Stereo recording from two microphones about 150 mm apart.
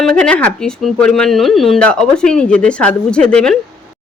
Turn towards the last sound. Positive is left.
turn(degrees=5)  # may be behind; listen again after turning